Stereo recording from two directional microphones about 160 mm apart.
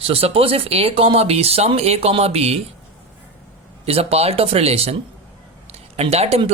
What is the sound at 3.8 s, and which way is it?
Speech, 40° right (ahead or behind).